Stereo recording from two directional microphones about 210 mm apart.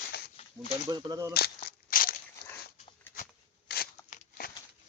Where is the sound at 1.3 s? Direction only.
45° left (ahead or behind).